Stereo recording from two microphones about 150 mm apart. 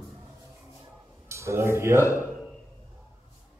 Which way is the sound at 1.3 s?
20° right (ahead or behind).